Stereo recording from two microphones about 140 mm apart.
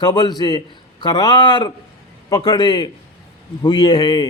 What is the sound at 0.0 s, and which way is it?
A man's voice, 30° left (ahead or behind).